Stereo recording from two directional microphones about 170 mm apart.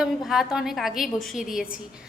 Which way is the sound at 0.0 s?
Centre (ahead or behind).